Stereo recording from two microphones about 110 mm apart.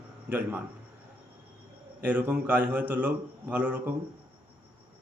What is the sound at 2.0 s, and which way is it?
A man's voice, 15° right (ahead or behind).